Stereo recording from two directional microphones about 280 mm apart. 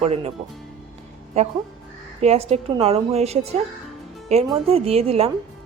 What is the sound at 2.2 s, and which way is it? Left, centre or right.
A woman's voice, right.